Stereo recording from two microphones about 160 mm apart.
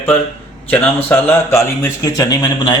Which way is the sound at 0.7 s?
15° left (ahead or behind).